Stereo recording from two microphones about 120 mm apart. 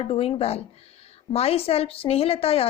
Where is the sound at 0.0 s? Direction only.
55° left (ahead or behind).